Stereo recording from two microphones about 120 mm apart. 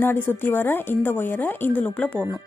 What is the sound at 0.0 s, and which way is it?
Speech, 20° left (ahead or behind).